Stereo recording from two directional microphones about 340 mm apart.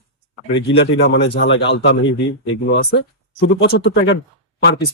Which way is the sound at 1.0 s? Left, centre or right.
Left.